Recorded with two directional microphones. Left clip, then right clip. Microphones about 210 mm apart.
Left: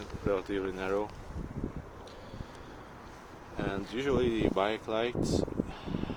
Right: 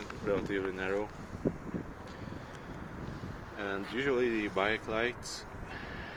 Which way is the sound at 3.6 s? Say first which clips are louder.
Even; 10° left (ahead or behind).